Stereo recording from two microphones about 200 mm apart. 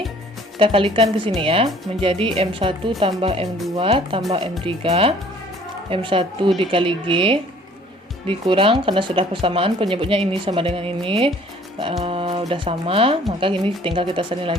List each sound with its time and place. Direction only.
0.6 s speech: 25° right (ahead or behind)